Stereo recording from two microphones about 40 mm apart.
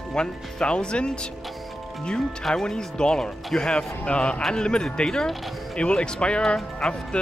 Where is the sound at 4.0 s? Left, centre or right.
Left.